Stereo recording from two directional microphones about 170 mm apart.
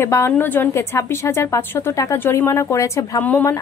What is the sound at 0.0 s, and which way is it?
A woman's voice, 15° left (ahead or behind).